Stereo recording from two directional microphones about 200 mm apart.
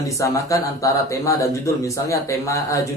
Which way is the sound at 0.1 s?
15° left (ahead or behind).